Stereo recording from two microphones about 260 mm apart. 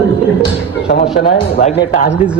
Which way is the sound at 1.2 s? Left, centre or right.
Left.